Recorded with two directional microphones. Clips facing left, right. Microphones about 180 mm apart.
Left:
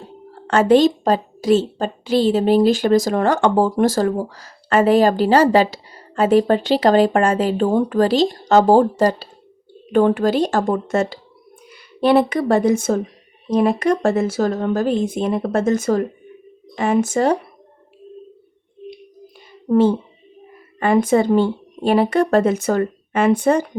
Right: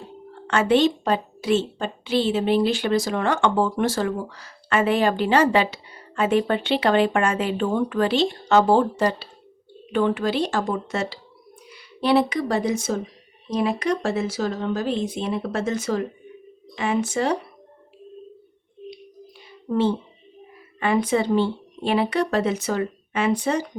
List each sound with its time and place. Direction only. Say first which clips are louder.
0.3 s a woman's voice: left 6 dB; 40° left (ahead or behind)
19.6 s a woman's voice: left 7 dB; 45° left (ahead or behind)